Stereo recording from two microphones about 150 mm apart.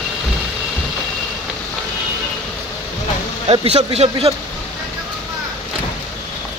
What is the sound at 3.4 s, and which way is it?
Speech, 40° right (ahead or behind).